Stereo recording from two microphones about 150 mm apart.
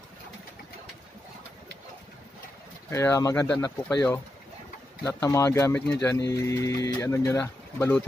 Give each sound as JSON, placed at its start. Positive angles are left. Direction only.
{"t": 2.9, "sound": "speech", "side_deg": 20}